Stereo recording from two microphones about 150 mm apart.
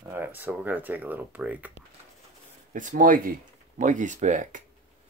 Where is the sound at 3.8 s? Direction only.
55° right (ahead or behind).